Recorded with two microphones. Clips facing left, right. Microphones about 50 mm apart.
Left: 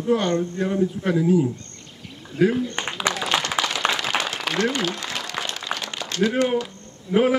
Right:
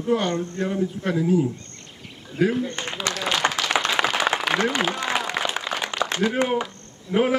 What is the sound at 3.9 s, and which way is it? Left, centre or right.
Applause, right.